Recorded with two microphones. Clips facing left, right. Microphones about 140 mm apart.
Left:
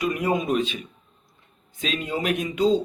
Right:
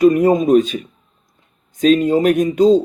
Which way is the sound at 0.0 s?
40° right (ahead or behind).